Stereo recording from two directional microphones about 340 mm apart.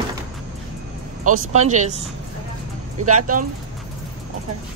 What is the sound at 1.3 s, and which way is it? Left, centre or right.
Speech, right.